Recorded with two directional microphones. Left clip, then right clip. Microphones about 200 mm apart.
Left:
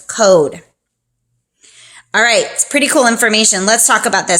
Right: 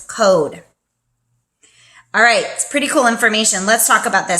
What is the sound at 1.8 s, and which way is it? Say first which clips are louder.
A woman's voice: even; 45° left (ahead or behind).